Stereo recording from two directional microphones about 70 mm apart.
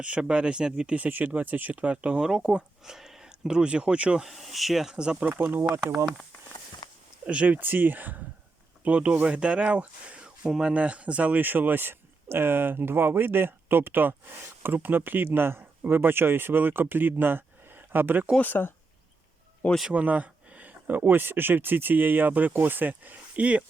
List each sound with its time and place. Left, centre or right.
0.0 s speech: centre
4.2 s speech: centre
5.4 s speech: right
6.8 s a sound: left
7.3 s speech: centre
18.3 s speech: left
19.9 s speech: right